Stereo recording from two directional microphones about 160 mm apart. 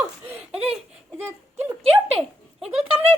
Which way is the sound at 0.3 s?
10° right (ahead or behind).